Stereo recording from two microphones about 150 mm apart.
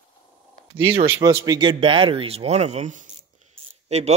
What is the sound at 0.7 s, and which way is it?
Speech, 35° right (ahead or behind).